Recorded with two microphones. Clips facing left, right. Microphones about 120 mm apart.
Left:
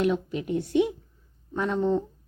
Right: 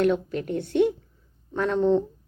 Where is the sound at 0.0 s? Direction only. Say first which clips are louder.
Right 3 dB; 10° left (ahead or behind).